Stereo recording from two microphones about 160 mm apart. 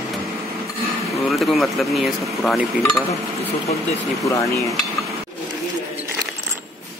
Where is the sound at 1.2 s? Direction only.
Centre (ahead or behind).